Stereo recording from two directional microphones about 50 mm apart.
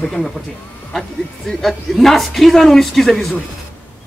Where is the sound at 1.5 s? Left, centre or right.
Centre.